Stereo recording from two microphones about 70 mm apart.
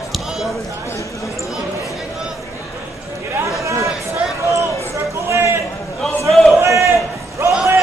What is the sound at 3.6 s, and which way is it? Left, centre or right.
Chatter, right.